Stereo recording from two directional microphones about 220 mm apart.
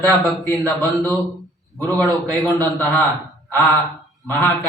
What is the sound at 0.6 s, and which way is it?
Speech, 15° right (ahead or behind).